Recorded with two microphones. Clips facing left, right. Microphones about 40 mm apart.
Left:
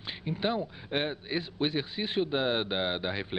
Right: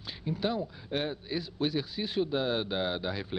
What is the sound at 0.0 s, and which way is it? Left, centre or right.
A man's voice, left.